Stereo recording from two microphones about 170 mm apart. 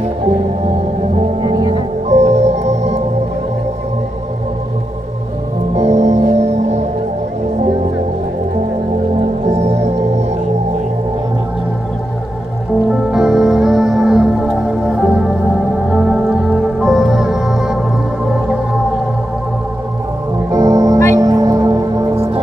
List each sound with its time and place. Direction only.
1.4 s music: 25° right (ahead or behind)
2.0 s music: 40° right (ahead or behind)
5.8 s music: 40° right (ahead or behind)
9.5 s music: 40° right (ahead or behind)
13.1 s music: 5° right (ahead or behind)
20.5 s organ: 20° right (ahead or behind)
21.2 s music: 20° right (ahead or behind)
22.1 s music: 35° right (ahead or behind)